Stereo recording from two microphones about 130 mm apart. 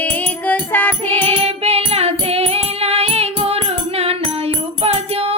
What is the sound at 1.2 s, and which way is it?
Music, 50° right (ahead or behind).